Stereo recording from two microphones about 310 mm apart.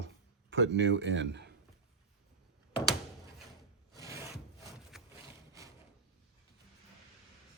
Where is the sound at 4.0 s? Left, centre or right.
Centre.